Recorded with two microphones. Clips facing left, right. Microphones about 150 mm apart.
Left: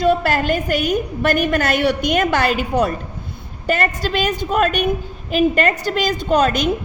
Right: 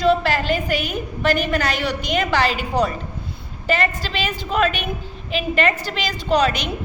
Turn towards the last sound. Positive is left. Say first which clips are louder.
# left 2 dB
turn(degrees=45)  # may be behind; listen again after turning